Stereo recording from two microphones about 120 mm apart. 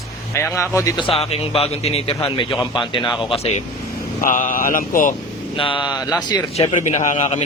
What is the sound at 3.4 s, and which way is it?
Speech, 65° left (ahead or behind).